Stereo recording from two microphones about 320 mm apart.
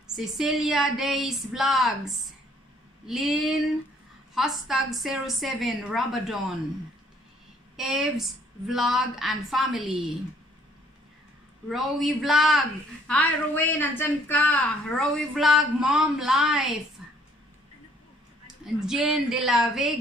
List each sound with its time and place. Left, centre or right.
0.0 s speech: centre
7.7 s speech: centre
11.7 s speech: centre
17.0 s a sound: centre
18.8 s speech: centre